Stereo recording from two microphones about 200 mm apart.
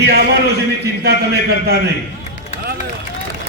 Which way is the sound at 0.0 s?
55° right (ahead or behind).